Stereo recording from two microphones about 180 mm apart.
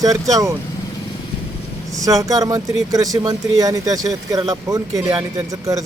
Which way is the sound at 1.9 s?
20° right (ahead or behind).